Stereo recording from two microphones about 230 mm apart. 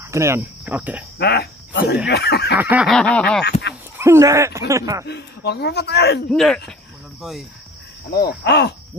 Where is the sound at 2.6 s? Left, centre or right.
Centre.